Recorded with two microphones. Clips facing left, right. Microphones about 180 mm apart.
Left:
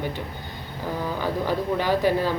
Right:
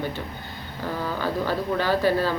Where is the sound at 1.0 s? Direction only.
15° left (ahead or behind).